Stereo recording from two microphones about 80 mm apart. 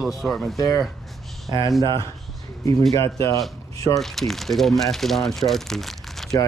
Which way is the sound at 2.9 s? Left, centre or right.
Left.